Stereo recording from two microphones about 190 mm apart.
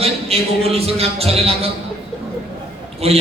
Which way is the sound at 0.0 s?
30° right (ahead or behind).